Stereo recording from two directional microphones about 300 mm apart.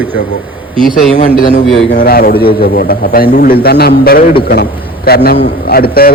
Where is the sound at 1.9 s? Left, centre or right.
Left.